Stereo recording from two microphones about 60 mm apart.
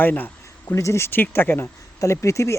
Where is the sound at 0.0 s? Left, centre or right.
Left.